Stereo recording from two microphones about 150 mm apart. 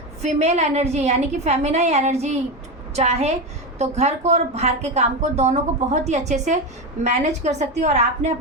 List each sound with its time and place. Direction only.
0.2 s a woman's voice: 45° right (ahead or behind)